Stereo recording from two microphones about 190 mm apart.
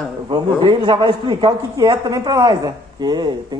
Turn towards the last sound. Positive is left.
turn(degrees=-20)  # may be behind; listen again after turning